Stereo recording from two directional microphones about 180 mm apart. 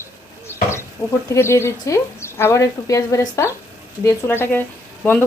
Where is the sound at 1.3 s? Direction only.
15° left (ahead or behind).